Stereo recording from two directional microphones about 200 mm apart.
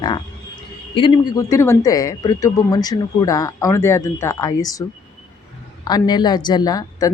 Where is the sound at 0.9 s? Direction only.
25° left (ahead or behind).